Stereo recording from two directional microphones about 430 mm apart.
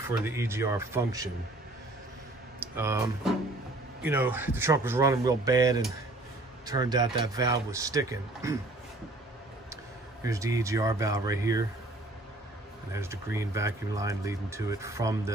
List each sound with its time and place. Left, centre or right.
0.0 s speech: centre
2.6 s speech: centre
10.2 s speech: centre
12.9 s speech: centre